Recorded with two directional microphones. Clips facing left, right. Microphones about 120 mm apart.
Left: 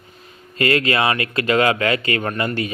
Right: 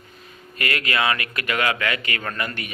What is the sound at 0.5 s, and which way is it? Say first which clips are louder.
Speech: left 7 dB; 30° left (ahead or behind).